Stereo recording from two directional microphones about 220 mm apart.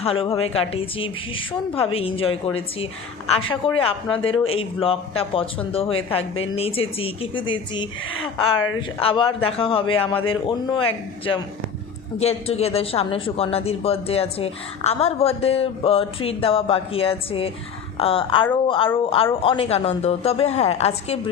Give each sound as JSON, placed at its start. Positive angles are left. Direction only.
{"t": 0.0, "sound": "a man's voice", "side_deg": 25}